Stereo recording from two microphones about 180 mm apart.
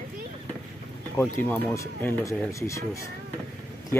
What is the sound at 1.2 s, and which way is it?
Speech, 5° left (ahead or behind).